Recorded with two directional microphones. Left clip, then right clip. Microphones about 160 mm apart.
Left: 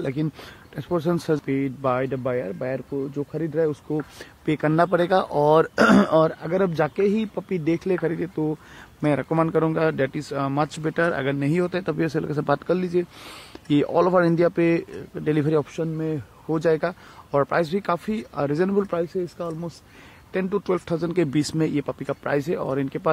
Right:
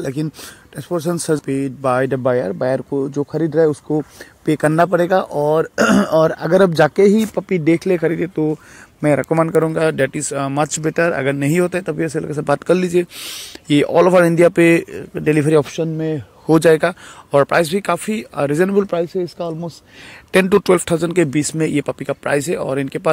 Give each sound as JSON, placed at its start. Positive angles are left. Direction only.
{"t": 0.0, "sound": "a man's voice", "side_deg": -25}
{"t": 2.0, "sound": "a man's voice", "side_deg": -45}
{"t": 6.3, "sound": "speech", "side_deg": -45}
{"t": 7.3, "sound": "a man's voice", "side_deg": -25}
{"t": 9.0, "sound": "a man's voice", "side_deg": -30}
{"t": 11.8, "sound": "speech", "side_deg": -5}
{"t": 12.6, "sound": "a man's voice", "side_deg": -30}
{"t": 13.2, "sound": "speech", "side_deg": 0}
{"t": 13.7, "sound": "a man's voice", "side_deg": -15}
{"t": 20.2, "sound": "speech", "side_deg": -50}
{"t": 20.8, "sound": "a man's voice", "side_deg": -30}